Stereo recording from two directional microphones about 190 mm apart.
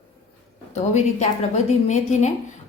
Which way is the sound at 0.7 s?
35° left (ahead or behind).